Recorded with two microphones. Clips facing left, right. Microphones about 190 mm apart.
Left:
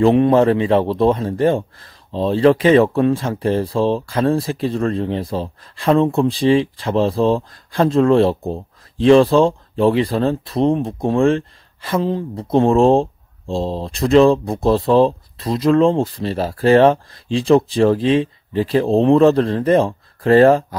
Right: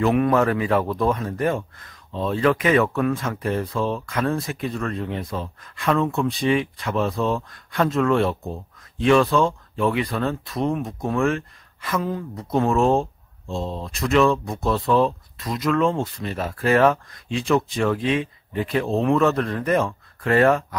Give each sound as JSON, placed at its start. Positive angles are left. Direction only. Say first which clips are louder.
{"t": 0.0, "sound": "a man's voice", "louder": "left 6 dB", "side_deg": 30}